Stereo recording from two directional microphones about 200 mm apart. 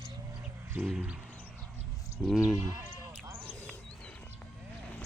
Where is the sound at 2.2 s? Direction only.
Centre (ahead or behind).